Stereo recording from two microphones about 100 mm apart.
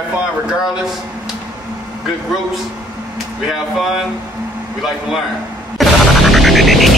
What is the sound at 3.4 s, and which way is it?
Speech, centre (ahead or behind).